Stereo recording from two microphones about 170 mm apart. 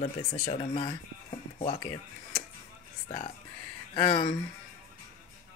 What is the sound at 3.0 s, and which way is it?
Speech, 35° left (ahead or behind).